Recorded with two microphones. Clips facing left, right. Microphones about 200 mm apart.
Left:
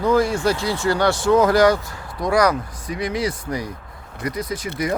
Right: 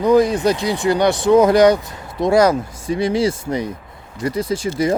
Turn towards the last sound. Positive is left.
turn(degrees=-30)  # may be behind; listen again after turning